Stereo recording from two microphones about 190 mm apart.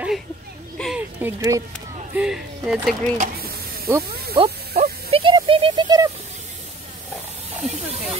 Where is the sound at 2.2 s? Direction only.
5° right (ahead or behind).